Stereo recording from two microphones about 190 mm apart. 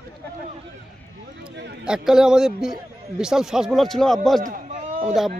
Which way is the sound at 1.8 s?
5° right (ahead or behind).